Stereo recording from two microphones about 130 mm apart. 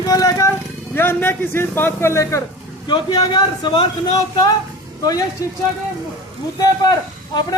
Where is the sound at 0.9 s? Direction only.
15° left (ahead or behind); by 3.8 s 35° left (ahead or behind).